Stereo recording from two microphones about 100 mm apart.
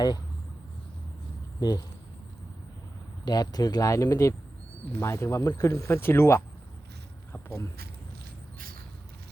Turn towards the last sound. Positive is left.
turn(degrees=25)  # may be behind; listen again after turning